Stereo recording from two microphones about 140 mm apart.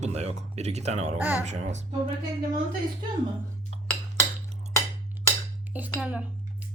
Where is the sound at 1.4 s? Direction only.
55° right (ahead or behind).